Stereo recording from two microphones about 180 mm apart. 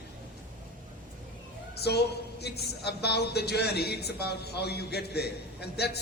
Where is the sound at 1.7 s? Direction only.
65° left (ahead or behind).